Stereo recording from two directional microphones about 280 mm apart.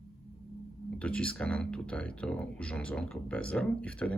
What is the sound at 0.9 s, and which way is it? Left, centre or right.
Speech, centre.